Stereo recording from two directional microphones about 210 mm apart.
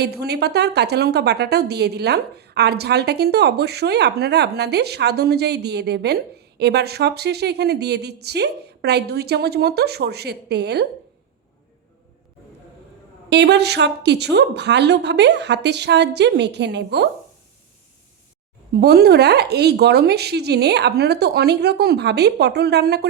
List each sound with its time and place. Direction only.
0.0 s a woman's voice: 50° right (ahead or behind)
13.3 s a woman's voice: 55° right (ahead or behind)
18.7 s a woman's voice: 50° right (ahead or behind)